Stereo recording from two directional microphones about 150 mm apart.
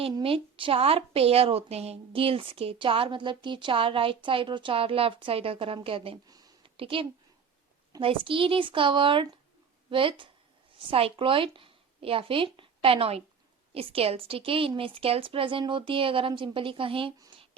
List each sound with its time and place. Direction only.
0.2 s a woman's voice: 35° right (ahead or behind)
6.2 s a sound: 25° right (ahead or behind)
6.7 s a woman's voice: 35° right (ahead or behind)